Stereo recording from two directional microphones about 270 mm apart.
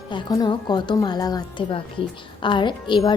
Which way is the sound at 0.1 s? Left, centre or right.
Centre.